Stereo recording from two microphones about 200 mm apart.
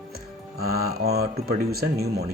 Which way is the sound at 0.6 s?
50° right (ahead or behind).